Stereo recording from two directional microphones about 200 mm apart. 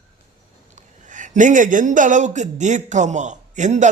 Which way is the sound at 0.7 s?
40° right (ahead or behind).